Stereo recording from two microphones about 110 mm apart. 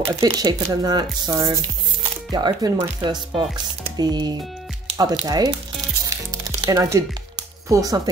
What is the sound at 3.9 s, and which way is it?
Speech, 40° right (ahead or behind).